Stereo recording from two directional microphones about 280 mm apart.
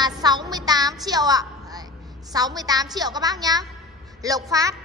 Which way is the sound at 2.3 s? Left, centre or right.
Centre.